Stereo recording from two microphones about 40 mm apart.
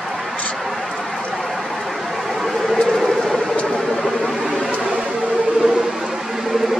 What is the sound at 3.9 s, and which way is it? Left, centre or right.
Vehicle, centre.